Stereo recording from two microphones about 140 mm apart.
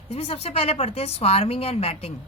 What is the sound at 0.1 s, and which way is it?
Speech, 45° left (ahead or behind).